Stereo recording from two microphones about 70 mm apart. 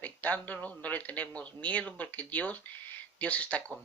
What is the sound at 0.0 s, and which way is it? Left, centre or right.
Speech, left.